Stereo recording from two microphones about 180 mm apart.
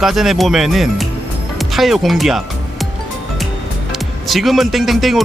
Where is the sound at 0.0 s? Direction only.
Centre (ahead or behind).